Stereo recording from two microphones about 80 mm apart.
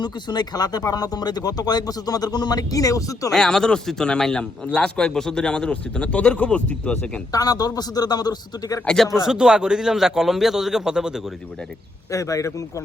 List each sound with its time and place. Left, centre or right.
0.0 s speech: left
3.3 s a man's voice: centre
7.3 s a man's voice: left
9.1 s a man's voice: centre
12.1 s speech: left